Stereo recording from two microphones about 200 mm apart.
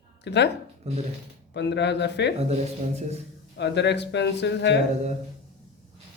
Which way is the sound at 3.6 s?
60° left (ahead or behind).